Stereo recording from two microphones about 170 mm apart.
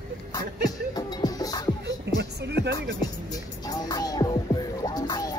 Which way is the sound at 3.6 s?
25° left (ahead or behind).